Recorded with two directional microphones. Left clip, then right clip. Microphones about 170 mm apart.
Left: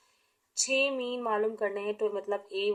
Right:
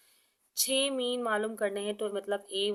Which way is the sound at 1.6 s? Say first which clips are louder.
Left 1 dB; 45° right (ahead or behind).